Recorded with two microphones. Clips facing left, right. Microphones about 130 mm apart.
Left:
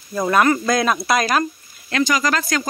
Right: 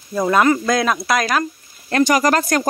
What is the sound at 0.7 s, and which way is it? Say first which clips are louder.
Speech: even; 5° left (ahead or behind).